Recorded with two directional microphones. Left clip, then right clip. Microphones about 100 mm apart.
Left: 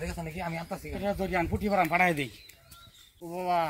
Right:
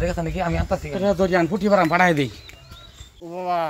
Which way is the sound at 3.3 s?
20° right (ahead or behind).